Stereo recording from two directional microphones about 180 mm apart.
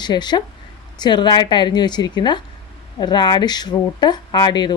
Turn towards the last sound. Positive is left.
turn(degrees=25)  # may be behind; listen again after turning